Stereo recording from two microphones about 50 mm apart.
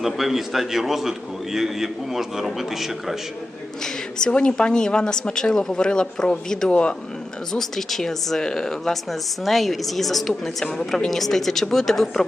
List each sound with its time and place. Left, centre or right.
0.0 s a woman's voice: centre
4.3 s speech: left
7.5 s a woman's voice: centre